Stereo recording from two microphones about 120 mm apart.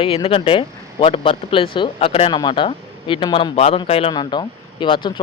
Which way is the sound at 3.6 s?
55° left (ahead or behind).